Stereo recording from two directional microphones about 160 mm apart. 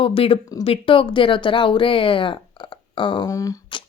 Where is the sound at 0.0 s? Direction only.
35° left (ahead or behind).